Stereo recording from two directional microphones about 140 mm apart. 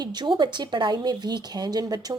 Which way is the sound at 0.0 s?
30° right (ahead or behind).